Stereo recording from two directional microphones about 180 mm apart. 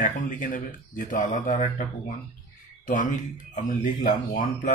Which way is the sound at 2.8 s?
45° left (ahead or behind).